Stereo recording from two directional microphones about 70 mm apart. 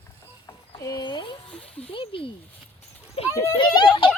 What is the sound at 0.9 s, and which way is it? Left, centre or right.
Speech, left.